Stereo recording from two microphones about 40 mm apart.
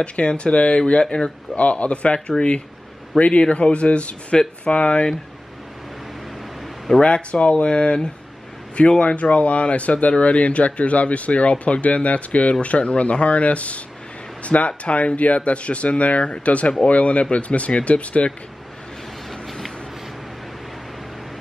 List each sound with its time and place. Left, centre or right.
0.0 s speech: left
7.0 s speech: left
19.4 s vehicle: centre